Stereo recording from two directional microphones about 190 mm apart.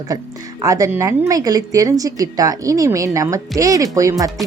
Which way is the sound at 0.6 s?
15° right (ahead or behind).